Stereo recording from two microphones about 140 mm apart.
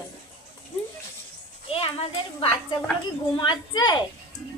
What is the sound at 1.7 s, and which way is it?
Speech, 45° left (ahead or behind).